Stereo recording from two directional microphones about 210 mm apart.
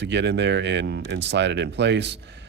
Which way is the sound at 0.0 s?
55° right (ahead or behind).